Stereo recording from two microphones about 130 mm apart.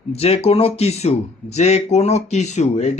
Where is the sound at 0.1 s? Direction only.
50° left (ahead or behind).